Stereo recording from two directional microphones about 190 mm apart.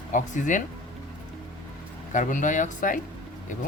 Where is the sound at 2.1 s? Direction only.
40° left (ahead or behind).